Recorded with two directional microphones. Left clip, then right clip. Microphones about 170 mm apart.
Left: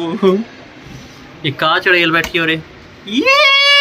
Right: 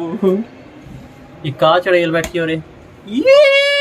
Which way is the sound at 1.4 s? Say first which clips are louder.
Right 1 dB; 20° right (ahead or behind).